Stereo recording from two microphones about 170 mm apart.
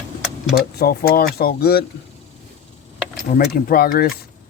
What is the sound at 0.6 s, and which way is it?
Speech, 60° left (ahead or behind).